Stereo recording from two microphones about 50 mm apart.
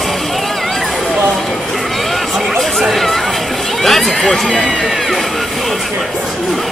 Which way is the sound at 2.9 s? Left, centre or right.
Centre.